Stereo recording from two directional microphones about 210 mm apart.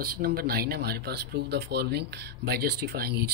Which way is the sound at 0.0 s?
45° right (ahead or behind).